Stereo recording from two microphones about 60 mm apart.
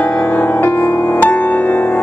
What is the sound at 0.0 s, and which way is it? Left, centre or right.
Music, left.